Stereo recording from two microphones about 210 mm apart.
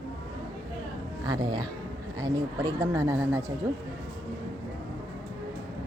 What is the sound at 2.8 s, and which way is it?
Speech, 15° right (ahead or behind).